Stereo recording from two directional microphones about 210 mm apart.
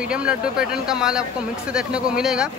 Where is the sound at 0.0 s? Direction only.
5° right (ahead or behind).